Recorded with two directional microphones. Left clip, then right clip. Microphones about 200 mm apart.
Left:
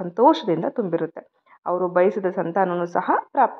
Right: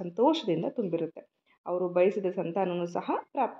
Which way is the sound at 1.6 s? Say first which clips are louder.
Left 7 dB; 25° left (ahead or behind).